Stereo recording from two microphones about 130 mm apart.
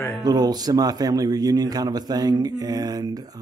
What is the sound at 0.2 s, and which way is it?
Speech, 30° right (ahead or behind).